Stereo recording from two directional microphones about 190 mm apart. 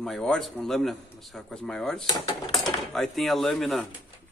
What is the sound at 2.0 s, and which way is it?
Speech, 25° left (ahead or behind).